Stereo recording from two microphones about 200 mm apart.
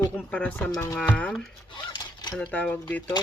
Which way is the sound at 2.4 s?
5° left (ahead or behind).